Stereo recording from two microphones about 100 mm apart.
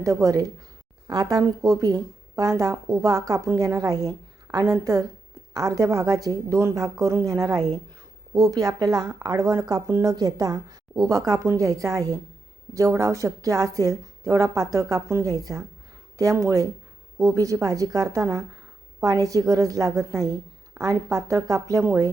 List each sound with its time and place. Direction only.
0.0 s a woman's voice: 35° right (ahead or behind)